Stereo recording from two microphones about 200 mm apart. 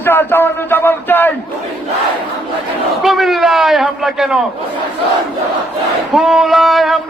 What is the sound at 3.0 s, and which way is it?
A man's voice, centre (ahead or behind).